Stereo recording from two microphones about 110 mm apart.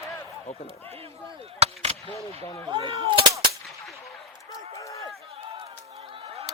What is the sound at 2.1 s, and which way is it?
Speech, 25° left (ahead or behind).